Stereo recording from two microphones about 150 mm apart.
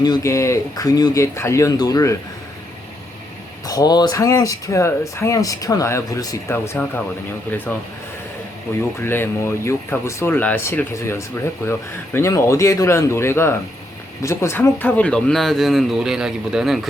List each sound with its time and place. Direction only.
0.0 s speech: 25° left (ahead or behind)
3.7 s speech: 25° left (ahead or behind)
7.5 s speech: 10° left (ahead or behind)
9.0 s speech: 15° left (ahead or behind); by 16.9 s centre (ahead or behind)